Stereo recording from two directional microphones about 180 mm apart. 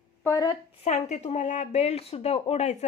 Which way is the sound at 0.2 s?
15° left (ahead or behind).